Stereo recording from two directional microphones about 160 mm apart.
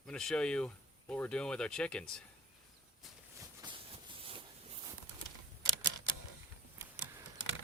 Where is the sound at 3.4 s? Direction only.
30° right (ahead or behind).